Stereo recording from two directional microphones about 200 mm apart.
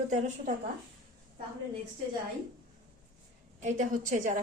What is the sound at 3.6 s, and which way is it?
Speech, 40° right (ahead or behind).